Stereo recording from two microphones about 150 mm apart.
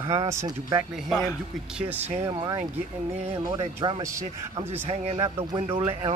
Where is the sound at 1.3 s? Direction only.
10° right (ahead or behind).